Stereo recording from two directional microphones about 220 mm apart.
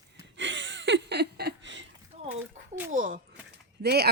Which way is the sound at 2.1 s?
25° right (ahead or behind).